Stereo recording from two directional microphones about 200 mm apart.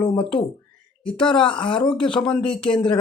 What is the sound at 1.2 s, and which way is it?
Speech, 25° left (ahead or behind).